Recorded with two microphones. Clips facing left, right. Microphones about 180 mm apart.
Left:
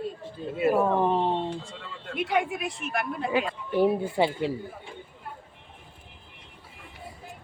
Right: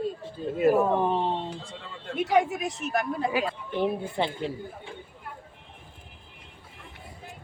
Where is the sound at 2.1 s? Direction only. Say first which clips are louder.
Right 3 dB; 40° right (ahead or behind).